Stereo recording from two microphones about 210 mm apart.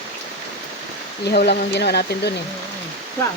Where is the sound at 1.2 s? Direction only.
50° left (ahead or behind).